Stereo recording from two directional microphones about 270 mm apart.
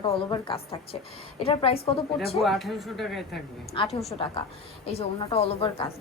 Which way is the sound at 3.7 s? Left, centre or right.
Centre.